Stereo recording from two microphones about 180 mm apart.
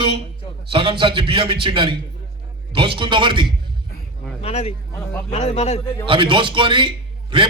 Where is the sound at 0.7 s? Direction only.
30° right (ahead or behind).